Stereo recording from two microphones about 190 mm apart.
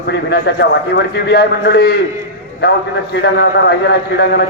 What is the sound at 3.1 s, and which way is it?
A man's voice, 60° left (ahead or behind).